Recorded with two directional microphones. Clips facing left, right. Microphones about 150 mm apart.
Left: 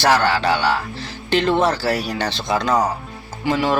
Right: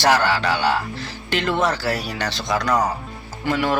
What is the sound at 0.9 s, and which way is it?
Speech, 30° left (ahead or behind).